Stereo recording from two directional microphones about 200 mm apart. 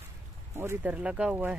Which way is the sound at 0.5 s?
10° right (ahead or behind).